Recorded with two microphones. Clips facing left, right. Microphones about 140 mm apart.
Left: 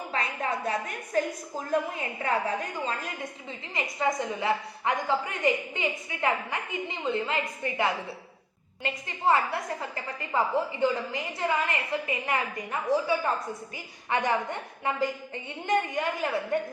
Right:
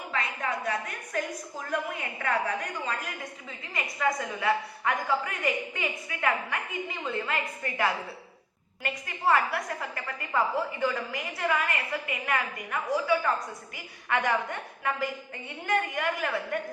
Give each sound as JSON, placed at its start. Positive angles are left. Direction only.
{"t": 0.1, "sound": "a woman's voice", "side_deg": 25}